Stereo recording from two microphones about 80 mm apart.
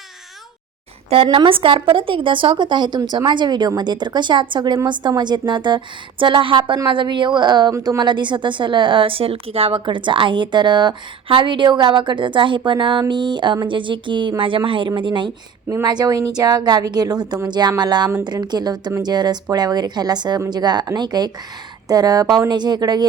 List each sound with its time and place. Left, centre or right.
1.3 s a woman's voice: right
13.7 s a woman's voice: right
15.8 s a woman's voice: right